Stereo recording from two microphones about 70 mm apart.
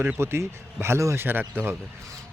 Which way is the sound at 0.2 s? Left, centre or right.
Right.